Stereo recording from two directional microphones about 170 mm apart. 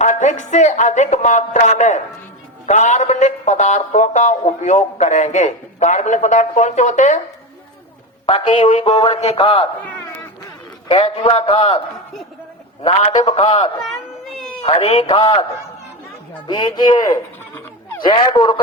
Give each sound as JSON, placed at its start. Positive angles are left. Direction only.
{"t": 0.0, "sound": "a man's voice", "side_deg": 45}
{"t": 8.3, "sound": "a man's voice", "side_deg": 30}
{"t": 10.8, "sound": "a man's voice", "side_deg": 35}
{"t": 13.0, "sound": "a man's voice", "side_deg": 35}
{"t": 13.8, "sound": "a sound", "side_deg": 0}
{"t": 14.6, "sound": "a man's voice", "side_deg": 35}
{"t": 16.5, "sound": "speech", "side_deg": 25}
{"t": 18.1, "sound": "speech", "side_deg": 25}